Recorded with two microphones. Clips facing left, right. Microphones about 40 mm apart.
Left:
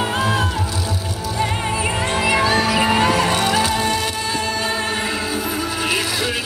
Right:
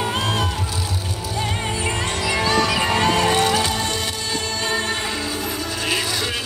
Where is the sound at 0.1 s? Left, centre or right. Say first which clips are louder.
Left 3 dB; centre.